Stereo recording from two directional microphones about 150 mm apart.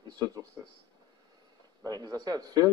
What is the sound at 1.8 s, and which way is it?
Speech, 25° right (ahead or behind).